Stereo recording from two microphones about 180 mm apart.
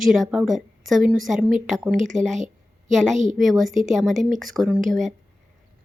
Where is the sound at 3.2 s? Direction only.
45° right (ahead or behind).